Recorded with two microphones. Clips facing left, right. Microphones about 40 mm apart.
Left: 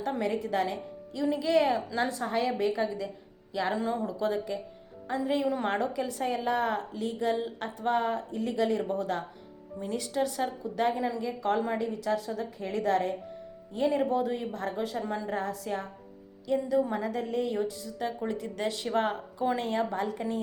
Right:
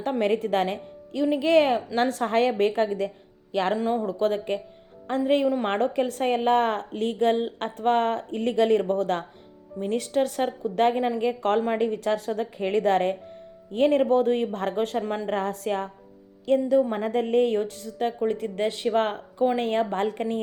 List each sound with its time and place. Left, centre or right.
0.0 s speech: right
1.2 s a woman's voice: right
3.8 s a woman's voice: right
9.8 s a woman's voice: right
11.2 s a woman's voice: right
13.7 s a woman's voice: right
14.9 s a woman's voice: right
15.3 s a woman's voice: right
16.5 s a woman's voice: right
17.2 s a woman's voice: right
18.2 s a woman's voice: right